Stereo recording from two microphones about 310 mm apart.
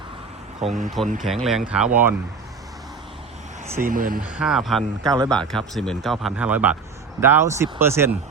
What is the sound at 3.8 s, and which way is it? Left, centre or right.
Speech, right.